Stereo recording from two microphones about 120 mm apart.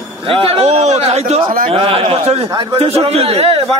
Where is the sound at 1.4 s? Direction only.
50° right (ahead or behind).